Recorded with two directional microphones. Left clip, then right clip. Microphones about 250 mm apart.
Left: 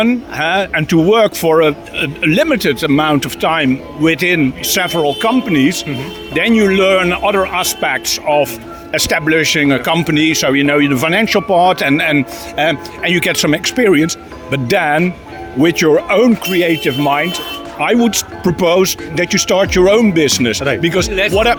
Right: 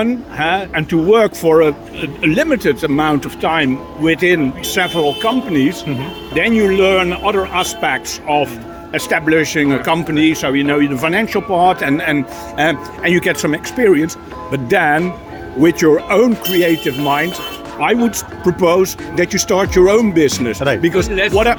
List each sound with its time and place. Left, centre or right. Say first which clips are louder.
0.0 s speech: left 2 dB; left